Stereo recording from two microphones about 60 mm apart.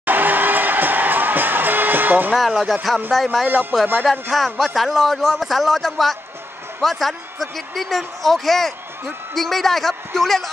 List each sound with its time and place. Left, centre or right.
0.0 s music: right
2.3 s speech: centre